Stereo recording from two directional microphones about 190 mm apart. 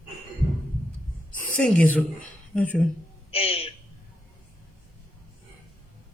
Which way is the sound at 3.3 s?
30° left (ahead or behind).